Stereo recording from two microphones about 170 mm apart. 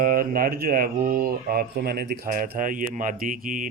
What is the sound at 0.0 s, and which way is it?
Speech, 60° right (ahead or behind).